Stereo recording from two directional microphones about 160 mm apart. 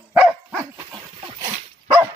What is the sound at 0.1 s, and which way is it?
Dog, 5° right (ahead or behind).